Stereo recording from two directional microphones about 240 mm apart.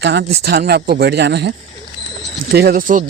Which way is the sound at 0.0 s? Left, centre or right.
Right.